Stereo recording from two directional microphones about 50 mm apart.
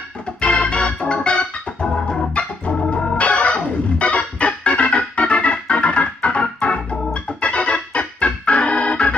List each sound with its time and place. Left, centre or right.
0.4 s organ: left